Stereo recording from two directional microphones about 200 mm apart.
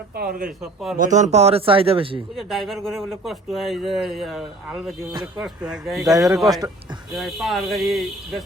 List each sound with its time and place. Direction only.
0.2 s speech: 45° right (ahead or behind)
0.6 s speech: centre (ahead or behind)
0.9 s a man's voice: 40° right (ahead or behind)
2.3 s speech: centre (ahead or behind)
6.1 s speech: 15° right (ahead or behind)
7.2 s speech: centre (ahead or behind)